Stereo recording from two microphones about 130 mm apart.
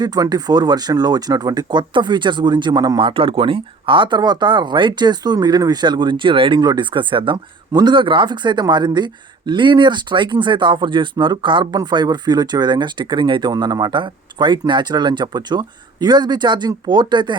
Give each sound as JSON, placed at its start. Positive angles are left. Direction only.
{"t": 0.0, "sound": "speech", "side_deg": -30}